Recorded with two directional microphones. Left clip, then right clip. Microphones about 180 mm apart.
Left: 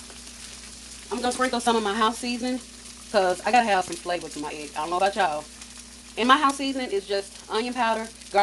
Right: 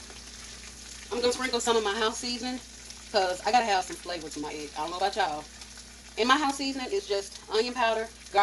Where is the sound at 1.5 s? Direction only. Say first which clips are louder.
Left 3 dB; 40° left (ahead or behind).